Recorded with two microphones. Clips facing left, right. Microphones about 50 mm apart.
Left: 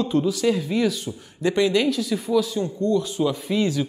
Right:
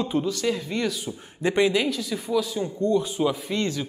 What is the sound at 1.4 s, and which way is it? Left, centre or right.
Speech, right.